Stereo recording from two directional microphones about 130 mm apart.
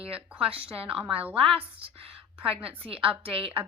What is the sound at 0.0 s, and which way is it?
A woman's voice, 45° right (ahead or behind).